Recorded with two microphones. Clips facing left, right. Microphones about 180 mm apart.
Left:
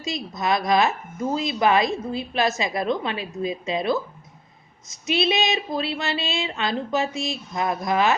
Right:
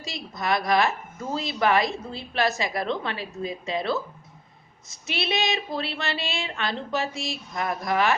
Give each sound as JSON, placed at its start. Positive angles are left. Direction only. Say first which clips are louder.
{"t": 0.0, "sound": "a woman's voice", "louder": "left 4 dB", "side_deg": 20}